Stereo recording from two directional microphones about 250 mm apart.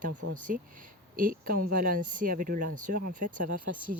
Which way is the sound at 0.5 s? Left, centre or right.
Right.